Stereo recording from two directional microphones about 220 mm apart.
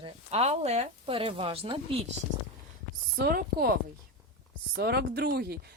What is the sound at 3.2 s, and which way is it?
Speech, 45° right (ahead or behind).